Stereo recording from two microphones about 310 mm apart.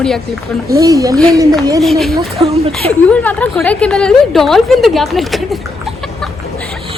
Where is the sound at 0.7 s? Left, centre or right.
Centre.